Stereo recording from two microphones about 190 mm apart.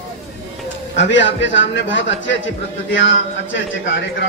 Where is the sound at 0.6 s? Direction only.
70° left (ahead or behind).